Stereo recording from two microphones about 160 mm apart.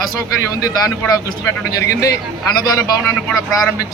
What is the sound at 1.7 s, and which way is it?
A man's voice, 20° left (ahead or behind).